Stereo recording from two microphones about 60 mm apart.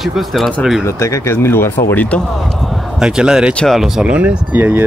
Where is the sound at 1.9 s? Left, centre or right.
Left.